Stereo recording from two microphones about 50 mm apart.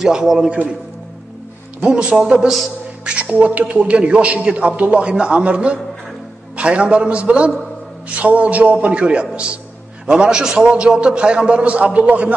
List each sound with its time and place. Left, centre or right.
0.0 s a man's voice: centre
1.8 s a man's voice: centre
3.2 s a man's voice: right